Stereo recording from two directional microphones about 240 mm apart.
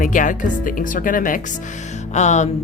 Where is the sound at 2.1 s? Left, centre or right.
Left.